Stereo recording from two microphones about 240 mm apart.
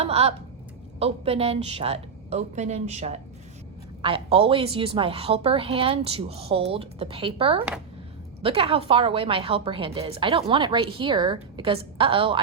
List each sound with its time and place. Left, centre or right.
0.0 s a woman's voice: right